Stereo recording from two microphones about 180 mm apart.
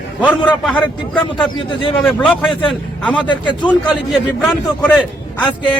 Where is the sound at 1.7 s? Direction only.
30° left (ahead or behind).